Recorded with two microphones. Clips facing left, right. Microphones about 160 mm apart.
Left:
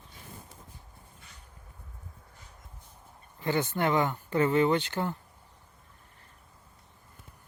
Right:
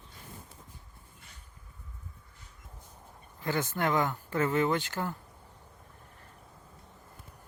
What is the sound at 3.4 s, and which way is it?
Speech, 15° left (ahead or behind).